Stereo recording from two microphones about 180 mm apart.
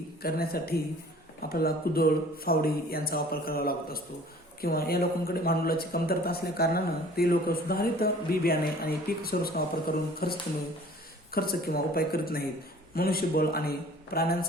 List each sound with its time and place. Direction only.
0.2 s speech: 55° left (ahead or behind)
11.3 s speech: 55° left (ahead or behind)